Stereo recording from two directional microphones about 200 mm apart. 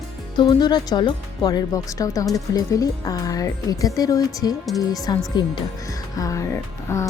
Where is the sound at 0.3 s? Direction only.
20° left (ahead or behind).